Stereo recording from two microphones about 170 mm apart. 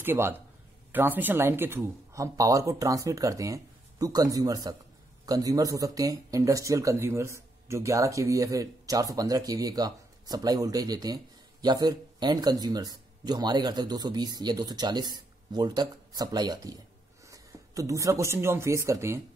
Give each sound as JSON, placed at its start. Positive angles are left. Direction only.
{"t": 0.0, "sound": "speech", "side_deg": -15}